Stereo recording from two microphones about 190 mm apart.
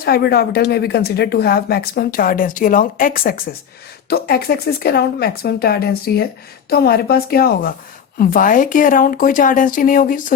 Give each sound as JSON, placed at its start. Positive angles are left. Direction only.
{"t": 0.0, "sound": "speech", "side_deg": 55}